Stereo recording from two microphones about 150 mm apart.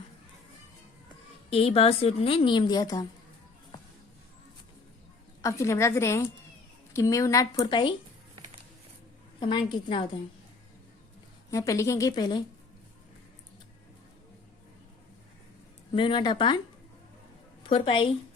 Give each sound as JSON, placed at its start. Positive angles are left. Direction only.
{"t": 1.5, "sound": "a woman's voice", "side_deg": 40}
{"t": 5.4, "sound": "a woman's voice", "side_deg": 20}
{"t": 9.4, "sound": "a woman's voice", "side_deg": 30}
{"t": 11.5, "sound": "a woman's voice", "side_deg": 20}
{"t": 15.9, "sound": "a woman's voice", "side_deg": 35}
{"t": 17.6, "sound": "a woman's voice", "side_deg": 35}